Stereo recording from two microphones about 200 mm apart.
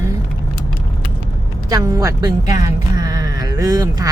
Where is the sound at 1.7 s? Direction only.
15° right (ahead or behind).